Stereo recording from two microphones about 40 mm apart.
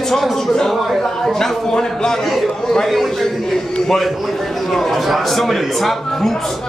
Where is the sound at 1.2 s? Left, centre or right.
Centre.